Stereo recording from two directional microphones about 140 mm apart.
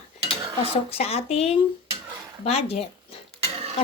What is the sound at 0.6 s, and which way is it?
A woman's voice, 45° left (ahead or behind).